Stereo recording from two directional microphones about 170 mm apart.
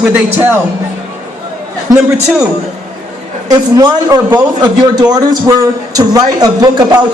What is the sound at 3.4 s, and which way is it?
A man's voice, 20° right (ahead or behind).